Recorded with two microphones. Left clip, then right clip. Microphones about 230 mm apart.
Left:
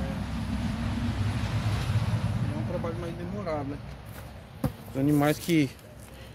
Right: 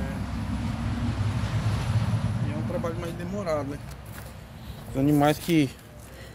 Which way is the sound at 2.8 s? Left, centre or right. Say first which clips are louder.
Right 2 dB; right.